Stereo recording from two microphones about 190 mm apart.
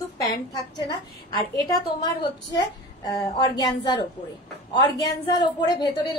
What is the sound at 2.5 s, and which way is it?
A woman's voice, 20° left (ahead or behind).